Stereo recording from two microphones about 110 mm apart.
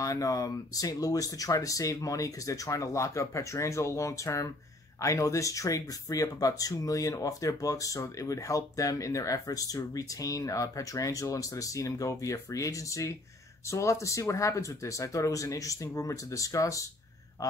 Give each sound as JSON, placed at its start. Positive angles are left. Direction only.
{"t": 0.0, "sound": "speech", "side_deg": 30}